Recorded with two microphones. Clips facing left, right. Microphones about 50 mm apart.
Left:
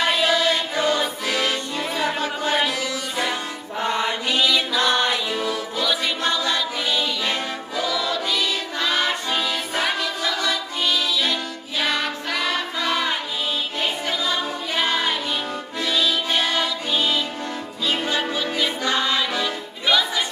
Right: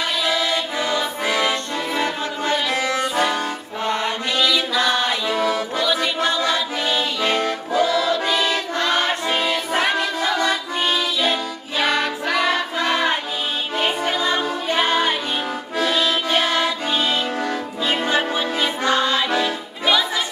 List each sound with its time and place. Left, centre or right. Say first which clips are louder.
0.3 s music: left 1 dB; right
2.7 s music: right 6 dB; right
5.3 s music: right 5 dB; right
6.2 s choir: right 1 dB; right
9.9 s music: right 4 dB; right
11.8 s music: right 4 dB; centre
14.0 s music: right 4 dB; right
14.9 s music: right 2 dB; centre
15.8 s music: right 2 dB; right
17.8 s music: right 3 dB; right
19.4 s music: right 3 dB; centre